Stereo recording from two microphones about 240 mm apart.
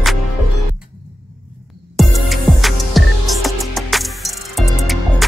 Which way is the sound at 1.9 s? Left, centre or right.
Centre.